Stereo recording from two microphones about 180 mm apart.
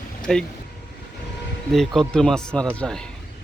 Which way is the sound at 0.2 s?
5° left (ahead or behind).